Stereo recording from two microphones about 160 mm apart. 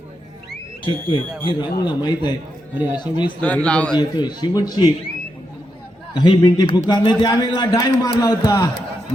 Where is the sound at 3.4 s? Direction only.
10° left (ahead or behind).